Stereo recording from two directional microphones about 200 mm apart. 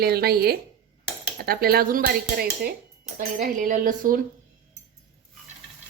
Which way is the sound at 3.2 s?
40° right (ahead or behind).